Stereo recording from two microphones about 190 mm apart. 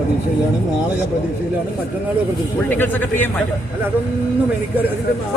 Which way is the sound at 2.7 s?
10° left (ahead or behind).